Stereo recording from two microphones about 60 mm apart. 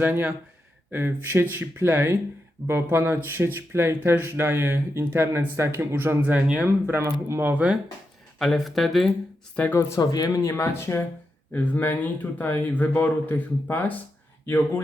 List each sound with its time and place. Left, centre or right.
0.0 s speech: right
7.4 s speech: right
8.4 s speech: centre
9.6 s speech: left
10.0 s speech: left
10.6 s speech: left
11.5 s speech: left